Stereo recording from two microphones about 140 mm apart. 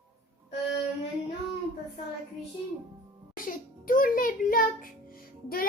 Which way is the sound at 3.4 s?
85° left.